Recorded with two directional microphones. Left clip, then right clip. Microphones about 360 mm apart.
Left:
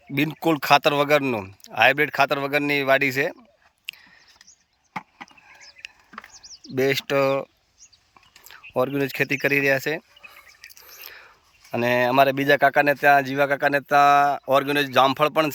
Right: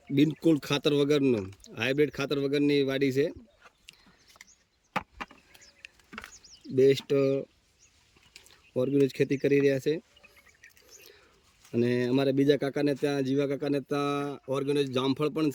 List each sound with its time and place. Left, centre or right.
0.1 s speech: centre
5.1 s a sound: centre
6.7 s speech: centre
8.7 s speech: centre
11.7 s speech: centre
15.2 s speech: centre